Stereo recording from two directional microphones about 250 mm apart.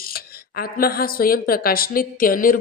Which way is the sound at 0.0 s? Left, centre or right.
Left.